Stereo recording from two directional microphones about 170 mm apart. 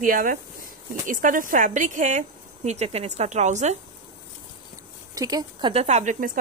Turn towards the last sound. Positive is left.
turn(degrees=-45)  # may be behind; listen again after turning